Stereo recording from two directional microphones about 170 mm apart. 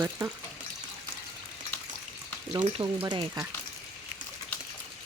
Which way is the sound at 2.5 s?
30° right (ahead or behind).